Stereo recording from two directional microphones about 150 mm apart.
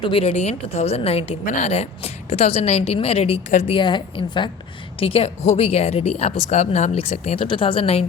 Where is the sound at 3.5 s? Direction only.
50° left (ahead or behind).